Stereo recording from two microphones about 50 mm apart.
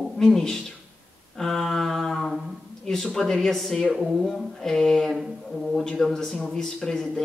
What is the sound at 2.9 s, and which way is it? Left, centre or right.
Speech, centre.